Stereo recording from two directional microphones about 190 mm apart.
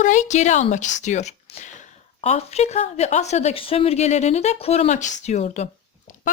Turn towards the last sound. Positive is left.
turn(degrees=35)  # may be behind; listen again after turning